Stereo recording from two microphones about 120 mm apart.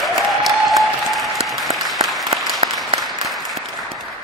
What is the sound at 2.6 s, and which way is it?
Applause, 60° right (ahead or behind).